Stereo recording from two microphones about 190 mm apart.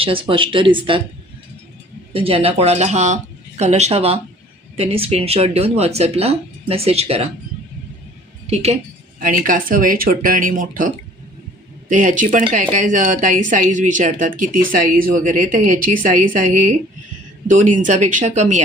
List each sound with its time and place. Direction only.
0.0 s speech: 30° right (ahead or behind)
2.1 s speech: 30° right (ahead or behind)
8.4 s speech: 35° right (ahead or behind)
9.2 s speech: 45° right (ahead or behind)